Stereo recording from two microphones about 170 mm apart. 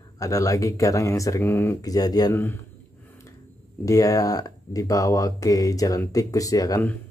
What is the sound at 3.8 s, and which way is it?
Speech, 20° left (ahead or behind).